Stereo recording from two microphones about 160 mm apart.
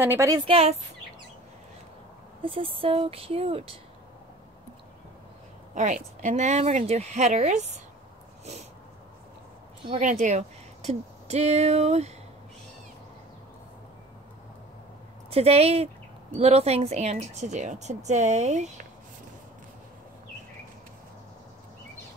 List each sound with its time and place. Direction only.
0.0 s a woman's voice: 15° right (ahead or behind)
0.5 s speech: 40° right (ahead or behind)
2.4 s speech: 35° right (ahead or behind)
5.8 s a woman's voice: 50° right (ahead or behind)
9.9 s speech: 50° right (ahead or behind)
15.2 s a woman's voice: 40° right (ahead or behind)